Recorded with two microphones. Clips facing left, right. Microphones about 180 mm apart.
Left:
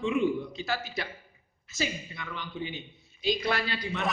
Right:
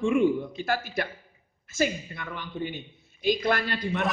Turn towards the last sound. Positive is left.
turn(degrees=-55)  # may be behind; listen again after turning